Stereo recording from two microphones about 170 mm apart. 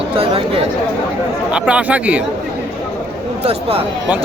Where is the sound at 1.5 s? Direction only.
5° right (ahead or behind).